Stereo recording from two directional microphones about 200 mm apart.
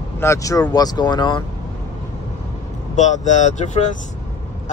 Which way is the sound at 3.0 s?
35° left (ahead or behind).